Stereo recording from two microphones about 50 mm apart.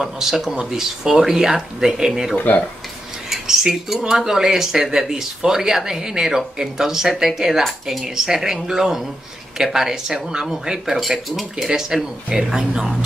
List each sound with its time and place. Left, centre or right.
0.0 s speech: centre
2.3 s speech: left
3.3 s speech: centre
11.0 s speech: centre